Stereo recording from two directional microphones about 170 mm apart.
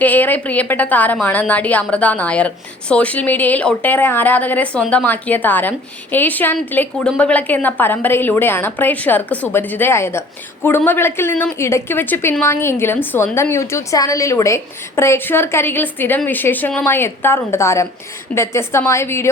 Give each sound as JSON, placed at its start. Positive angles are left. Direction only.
{"t": 0.0, "sound": "a woman's voice", "side_deg": 10}